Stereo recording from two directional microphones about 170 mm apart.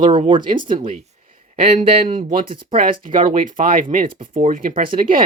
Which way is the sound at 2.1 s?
50° right (ahead or behind).